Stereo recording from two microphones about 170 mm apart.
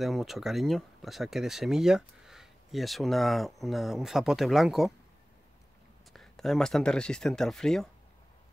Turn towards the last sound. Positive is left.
turn(degrees=0)  # may be behind; listen again after turning